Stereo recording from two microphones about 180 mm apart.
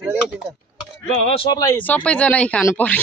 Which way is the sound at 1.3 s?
20° left (ahead or behind).